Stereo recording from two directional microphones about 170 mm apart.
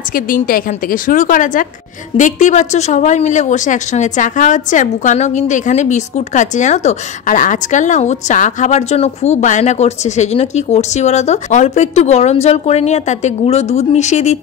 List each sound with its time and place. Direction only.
0.1 s speech: 55° left (ahead or behind)